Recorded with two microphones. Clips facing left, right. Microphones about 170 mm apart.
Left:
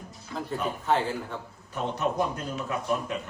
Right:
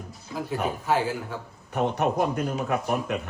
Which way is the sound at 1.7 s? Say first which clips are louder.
Right 4 dB; 65° right (ahead or behind).